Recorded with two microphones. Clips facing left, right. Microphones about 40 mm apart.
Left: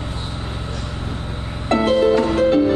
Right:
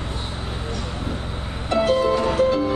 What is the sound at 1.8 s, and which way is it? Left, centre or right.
Music, left.